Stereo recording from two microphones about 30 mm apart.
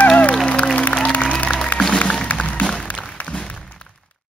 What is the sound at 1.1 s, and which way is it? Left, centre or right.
Music, left.